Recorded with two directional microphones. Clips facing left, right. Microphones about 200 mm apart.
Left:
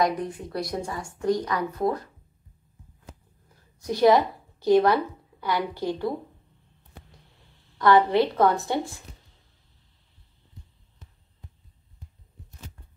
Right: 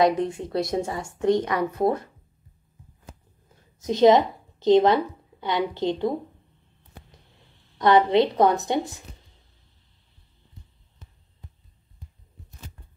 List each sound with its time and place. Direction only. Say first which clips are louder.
0.0 s a woman's voice: right 4 dB; 25° right (ahead or behind)
3.5 s speech: right 3 dB; 20° right (ahead or behind)
7.8 s a woman's voice: right 1 dB; 20° right (ahead or behind)